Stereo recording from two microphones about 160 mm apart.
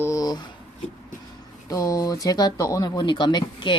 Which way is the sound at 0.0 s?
20° left (ahead or behind).